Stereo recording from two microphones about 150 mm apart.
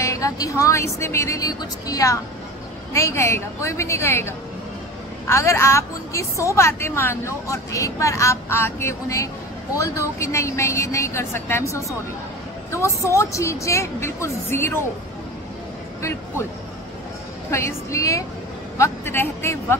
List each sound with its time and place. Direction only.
0.0 s a woman's voice: 20° left (ahead or behind)
16.0 s speech: 20° left (ahead or behind)
17.5 s a woman's voice: 20° left (ahead or behind)